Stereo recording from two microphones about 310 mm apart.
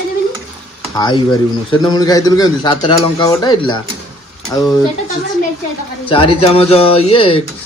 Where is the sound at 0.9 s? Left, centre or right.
Centre.